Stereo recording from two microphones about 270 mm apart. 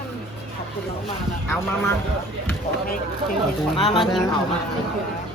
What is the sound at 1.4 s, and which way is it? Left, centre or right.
Speech, centre.